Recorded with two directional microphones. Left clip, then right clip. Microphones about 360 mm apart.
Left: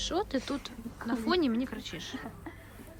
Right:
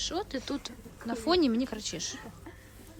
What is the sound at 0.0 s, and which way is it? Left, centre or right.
Speech, centre.